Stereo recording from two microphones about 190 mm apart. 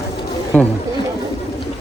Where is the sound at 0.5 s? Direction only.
10° left (ahead or behind).